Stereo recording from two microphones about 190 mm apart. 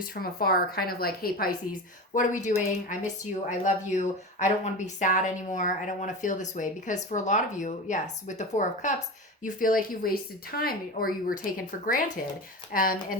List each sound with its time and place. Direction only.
0.0 s speech: 50° left (ahead or behind)
2.1 s speech: 40° left (ahead or behind)